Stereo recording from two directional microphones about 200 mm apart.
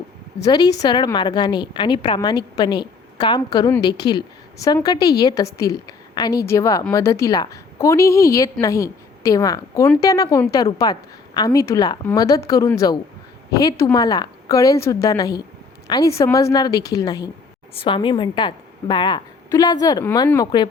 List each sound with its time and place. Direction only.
0.4 s a woman's voice: 20° left (ahead or behind)